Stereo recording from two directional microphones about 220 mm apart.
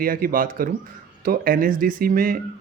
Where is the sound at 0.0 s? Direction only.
40° right (ahead or behind).